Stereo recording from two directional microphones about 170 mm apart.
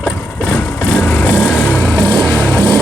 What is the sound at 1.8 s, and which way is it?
Vehicle, centre (ahead or behind).